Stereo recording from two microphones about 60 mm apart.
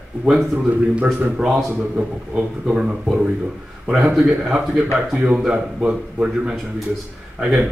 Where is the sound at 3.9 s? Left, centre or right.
Centre.